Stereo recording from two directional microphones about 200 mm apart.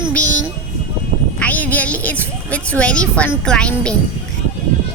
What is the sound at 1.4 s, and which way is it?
A woman's voice, 10° left (ahead or behind).